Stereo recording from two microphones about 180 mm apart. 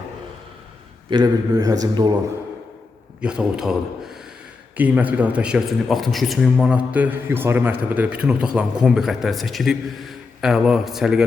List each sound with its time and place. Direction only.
1.1 s a man's voice: 20° right (ahead or behind)
3.2 s a man's voice: 5° right (ahead or behind)